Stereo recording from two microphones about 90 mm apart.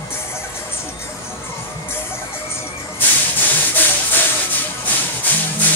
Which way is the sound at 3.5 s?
20° left (ahead or behind).